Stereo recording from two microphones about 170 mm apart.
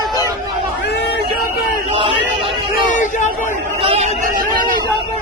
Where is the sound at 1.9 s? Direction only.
35° right (ahead or behind).